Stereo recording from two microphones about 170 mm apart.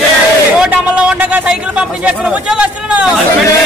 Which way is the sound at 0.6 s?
5° right (ahead or behind).